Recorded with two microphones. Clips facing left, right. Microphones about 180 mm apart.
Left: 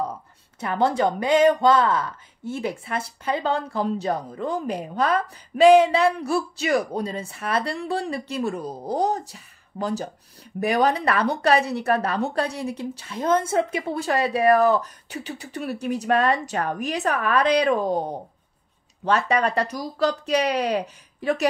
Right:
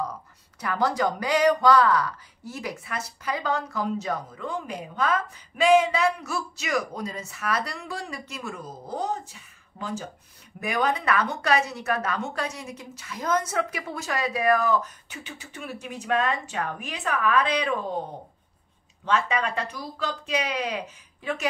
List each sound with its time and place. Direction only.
0.0 s speech: 25° left (ahead or behind)
19.0 s speech: 40° left (ahead or behind)